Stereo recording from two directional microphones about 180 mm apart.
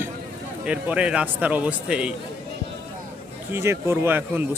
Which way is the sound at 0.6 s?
5° right (ahead or behind).